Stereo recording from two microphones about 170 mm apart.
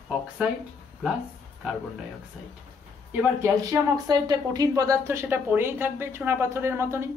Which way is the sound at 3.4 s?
20° right (ahead or behind).